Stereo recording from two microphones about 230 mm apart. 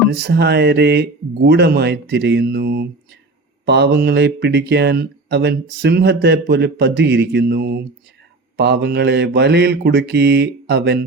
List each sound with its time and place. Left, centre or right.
0.1 s speech: right